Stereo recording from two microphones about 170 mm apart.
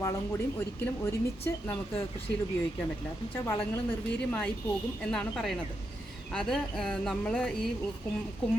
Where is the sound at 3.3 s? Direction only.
10° left (ahead or behind).